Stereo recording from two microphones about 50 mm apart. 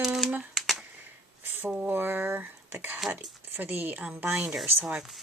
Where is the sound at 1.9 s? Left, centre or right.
Right.